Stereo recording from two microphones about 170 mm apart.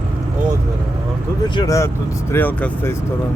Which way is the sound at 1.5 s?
20° left (ahead or behind).